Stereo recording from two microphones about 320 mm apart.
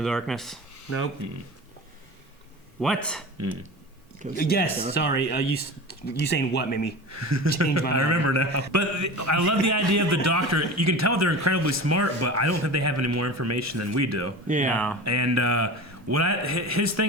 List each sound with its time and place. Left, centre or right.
0.0 s speech: centre
2.8 s speech: centre
4.4 s speech: left
7.1 s a man's voice: right
14.4 s speech: right
15.0 s a man's voice: right